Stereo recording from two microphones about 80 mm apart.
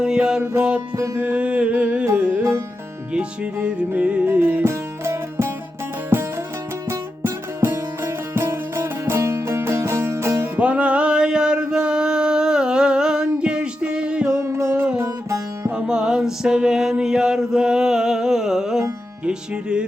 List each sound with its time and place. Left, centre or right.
0.0 s music: centre
3.1 s music: centre; by 10.5 s right
10.6 s a sound: centre
14.4 s music: right
15.7 s music: centre